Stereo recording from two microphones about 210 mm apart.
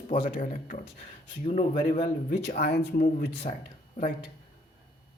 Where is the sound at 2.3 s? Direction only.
50° left (ahead or behind).